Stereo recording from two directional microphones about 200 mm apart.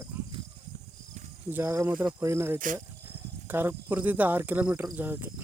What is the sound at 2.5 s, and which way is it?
Speech, 40° right (ahead or behind).